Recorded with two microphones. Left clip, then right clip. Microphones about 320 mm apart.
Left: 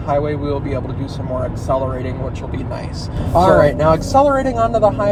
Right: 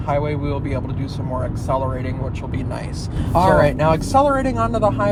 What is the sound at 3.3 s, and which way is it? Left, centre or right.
Speech, right.